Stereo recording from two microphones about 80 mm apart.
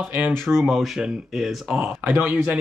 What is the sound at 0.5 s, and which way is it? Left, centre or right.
Speech, centre.